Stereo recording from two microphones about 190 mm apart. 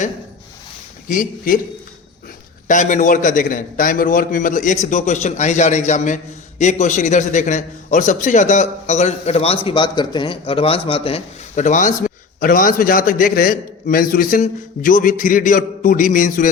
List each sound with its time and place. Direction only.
1.0 s a man's voice: 45° left (ahead or behind)
2.6 s a man's voice: 40° left (ahead or behind)